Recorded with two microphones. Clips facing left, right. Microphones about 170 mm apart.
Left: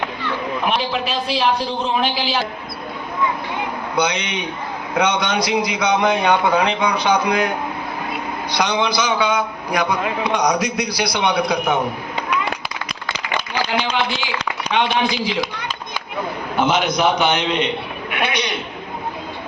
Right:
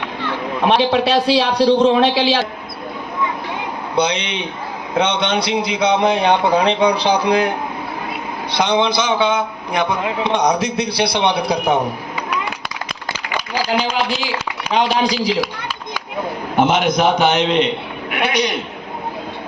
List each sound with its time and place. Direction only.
0.7 s a man's voice: 75° right (ahead or behind)
3.9 s a man's voice: 30° right (ahead or behind)
13.9 s a man's voice: 40° right (ahead or behind)
16.8 s a man's voice: 50° right (ahead or behind)